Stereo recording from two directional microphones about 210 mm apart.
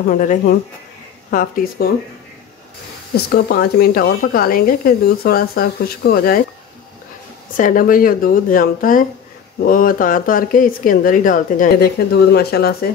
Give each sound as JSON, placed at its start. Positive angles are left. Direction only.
{"t": 0.1, "sound": "speech", "side_deg": 40}
{"t": 3.2, "sound": "a woman's voice", "side_deg": 45}
{"t": 7.5, "sound": "a woman's voice", "side_deg": 40}